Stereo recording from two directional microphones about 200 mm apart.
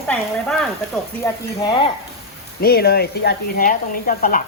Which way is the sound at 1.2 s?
20° left (ahead or behind).